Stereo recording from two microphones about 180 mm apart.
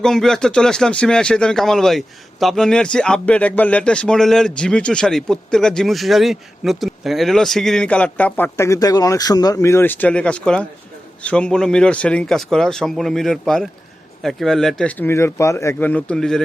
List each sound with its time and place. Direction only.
0.0 s speech: centre (ahead or behind)